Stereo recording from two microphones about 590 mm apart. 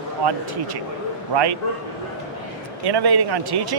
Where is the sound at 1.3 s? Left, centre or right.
Right.